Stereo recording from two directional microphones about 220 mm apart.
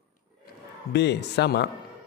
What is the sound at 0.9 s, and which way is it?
Speech, 50° left (ahead or behind).